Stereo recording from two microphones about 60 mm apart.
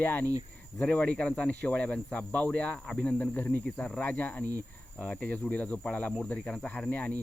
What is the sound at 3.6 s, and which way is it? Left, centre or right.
Speech, centre.